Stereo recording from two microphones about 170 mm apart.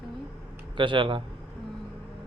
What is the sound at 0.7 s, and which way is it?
Speech, 30° right (ahead or behind).